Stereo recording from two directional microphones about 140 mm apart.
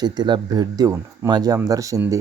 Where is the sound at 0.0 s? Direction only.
30° right (ahead or behind).